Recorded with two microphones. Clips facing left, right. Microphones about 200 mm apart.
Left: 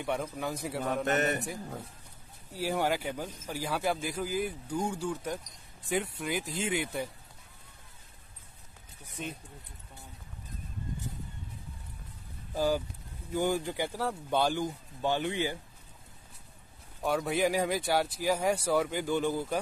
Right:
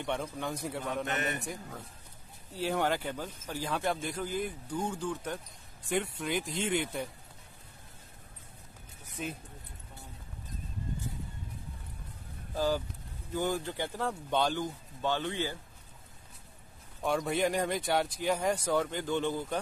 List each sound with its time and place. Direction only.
0.0 s a man's voice: 5° left (ahead or behind)
0.8 s a man's voice: 40° left (ahead or behind)
2.5 s a man's voice: 10° left (ahead or behind)
9.2 s speech: 5° right (ahead or behind)
12.5 s a man's voice: 10° left (ahead or behind)
17.0 s a man's voice: 5° left (ahead or behind)